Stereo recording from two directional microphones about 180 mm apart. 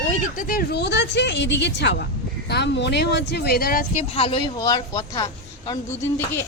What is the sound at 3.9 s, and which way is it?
Speech, 35° left (ahead or behind).